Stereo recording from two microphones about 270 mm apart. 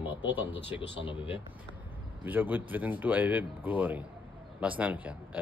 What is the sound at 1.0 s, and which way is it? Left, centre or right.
Speech, centre.